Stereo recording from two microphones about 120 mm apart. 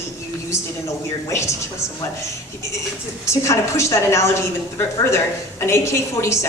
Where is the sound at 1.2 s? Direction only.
25° left (ahead or behind).